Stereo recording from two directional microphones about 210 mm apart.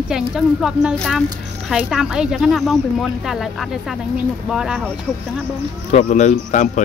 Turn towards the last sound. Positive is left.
turn(degrees=35)  # may be behind; listen again after turning